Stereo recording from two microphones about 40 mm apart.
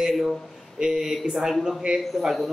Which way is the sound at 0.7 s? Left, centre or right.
Centre.